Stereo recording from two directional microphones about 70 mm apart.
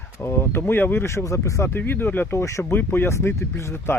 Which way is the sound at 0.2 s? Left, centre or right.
Left.